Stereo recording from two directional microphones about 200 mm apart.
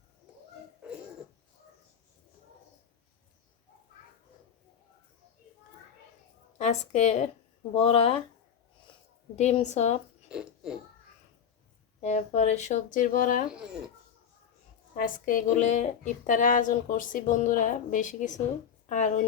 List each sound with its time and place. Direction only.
6.6 s a woman's voice: 35° left (ahead or behind)
9.3 s a woman's voice: 35° left (ahead or behind)
10.2 s a sound: 5° right (ahead or behind)
11.9 s a woman's voice: 35° left (ahead or behind)
13.5 s speech: 5° right (ahead or behind)
14.9 s a woman's voice: 45° left (ahead or behind)